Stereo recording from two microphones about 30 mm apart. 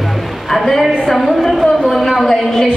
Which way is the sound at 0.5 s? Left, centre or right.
Centre.